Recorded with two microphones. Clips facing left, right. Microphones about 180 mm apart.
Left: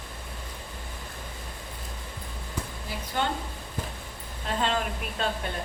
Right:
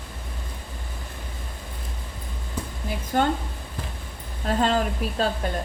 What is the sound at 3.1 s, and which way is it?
Speech, 45° right (ahead or behind).